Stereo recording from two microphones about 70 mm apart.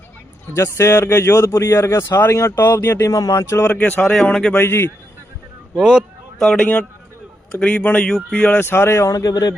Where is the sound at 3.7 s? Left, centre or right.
Left.